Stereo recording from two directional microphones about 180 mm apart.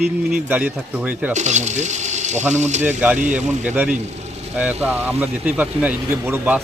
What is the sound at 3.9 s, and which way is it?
Vehicle, 40° right (ahead or behind).